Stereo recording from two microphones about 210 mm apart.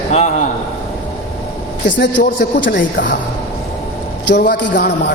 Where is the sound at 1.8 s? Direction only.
60° left (ahead or behind).